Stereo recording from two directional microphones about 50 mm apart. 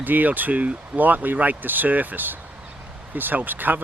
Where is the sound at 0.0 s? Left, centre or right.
Right.